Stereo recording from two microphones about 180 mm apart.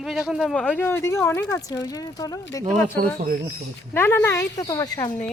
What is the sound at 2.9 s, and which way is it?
Speech, 55° right (ahead or behind).